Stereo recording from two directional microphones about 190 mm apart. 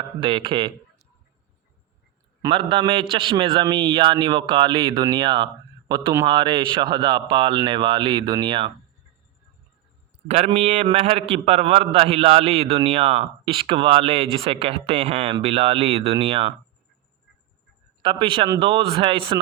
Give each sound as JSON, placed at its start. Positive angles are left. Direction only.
{"t": 0.2, "sound": "a man's voice", "side_deg": -25}
{"t": 2.4, "sound": "a man's voice", "side_deg": -25}
{"t": 10.2, "sound": "a man's voice", "side_deg": -35}
{"t": 18.0, "sound": "a man's voice", "side_deg": -25}